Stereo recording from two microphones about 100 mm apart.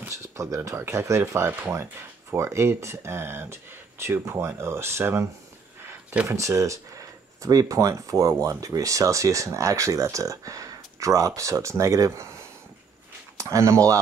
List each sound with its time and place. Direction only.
0.1 s speech: 30° right (ahead or behind)
13.4 s speech: 30° right (ahead or behind)